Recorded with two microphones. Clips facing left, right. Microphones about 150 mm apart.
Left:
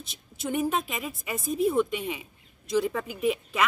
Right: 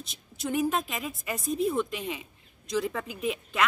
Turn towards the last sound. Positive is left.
turn(degrees=0)  # may be behind; listen again after turning